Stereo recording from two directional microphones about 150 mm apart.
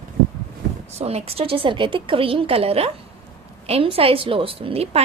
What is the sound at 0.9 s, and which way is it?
A woman's voice, 45° right (ahead or behind).